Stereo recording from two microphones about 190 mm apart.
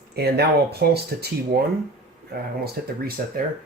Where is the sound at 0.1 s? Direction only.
55° right (ahead or behind).